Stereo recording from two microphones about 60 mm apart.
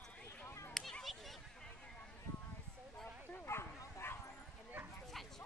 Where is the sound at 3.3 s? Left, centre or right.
Left.